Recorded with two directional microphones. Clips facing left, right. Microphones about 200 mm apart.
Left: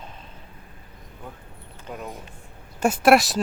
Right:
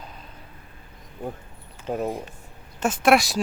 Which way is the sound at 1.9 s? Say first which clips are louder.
Right 9 dB; 40° right (ahead or behind).